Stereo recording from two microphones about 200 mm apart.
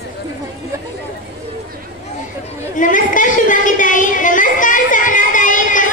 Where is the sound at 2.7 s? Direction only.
40° left (ahead or behind).